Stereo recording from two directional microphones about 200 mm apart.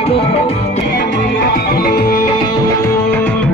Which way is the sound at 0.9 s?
55° left (ahead or behind).